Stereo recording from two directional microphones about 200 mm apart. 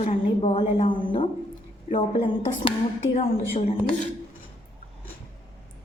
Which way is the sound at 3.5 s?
30° left (ahead or behind).